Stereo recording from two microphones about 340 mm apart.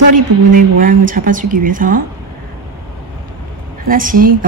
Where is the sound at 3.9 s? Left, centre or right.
Right.